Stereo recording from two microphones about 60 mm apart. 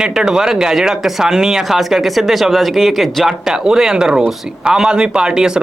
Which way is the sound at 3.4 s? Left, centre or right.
Centre.